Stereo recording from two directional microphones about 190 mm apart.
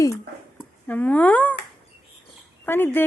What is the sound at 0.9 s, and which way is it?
Speech, 10° left (ahead or behind).